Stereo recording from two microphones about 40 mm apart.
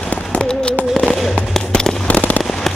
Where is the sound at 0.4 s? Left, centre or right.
Centre.